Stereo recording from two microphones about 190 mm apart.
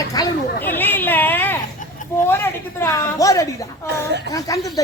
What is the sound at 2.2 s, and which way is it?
Speech, 15° left (ahead or behind).